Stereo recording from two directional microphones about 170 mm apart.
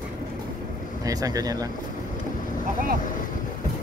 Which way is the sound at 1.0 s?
20° right (ahead or behind).